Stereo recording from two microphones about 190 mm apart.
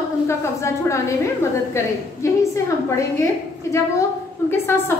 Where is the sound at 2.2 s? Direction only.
15° left (ahead or behind).